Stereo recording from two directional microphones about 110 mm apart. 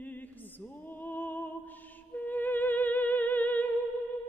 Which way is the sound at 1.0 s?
15° left (ahead or behind).